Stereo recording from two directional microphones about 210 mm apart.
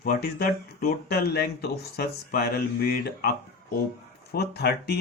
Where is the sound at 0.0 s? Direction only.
45° left (ahead or behind).